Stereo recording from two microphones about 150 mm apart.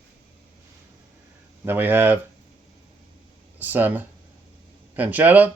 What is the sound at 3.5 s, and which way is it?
Speech, 10° right (ahead or behind).